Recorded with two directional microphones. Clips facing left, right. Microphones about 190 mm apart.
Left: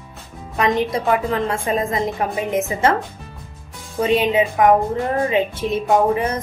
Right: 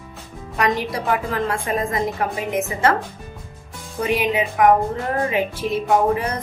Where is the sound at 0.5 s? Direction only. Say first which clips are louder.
Left 3 dB; 25° left (ahead or behind).